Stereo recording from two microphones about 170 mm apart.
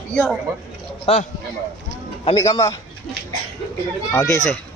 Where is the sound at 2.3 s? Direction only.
20° left (ahead or behind).